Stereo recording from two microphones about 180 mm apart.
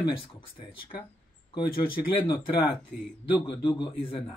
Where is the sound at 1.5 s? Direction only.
25° left (ahead or behind).